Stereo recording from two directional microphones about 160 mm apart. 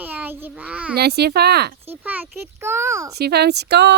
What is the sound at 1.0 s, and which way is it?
Speech, 90° right.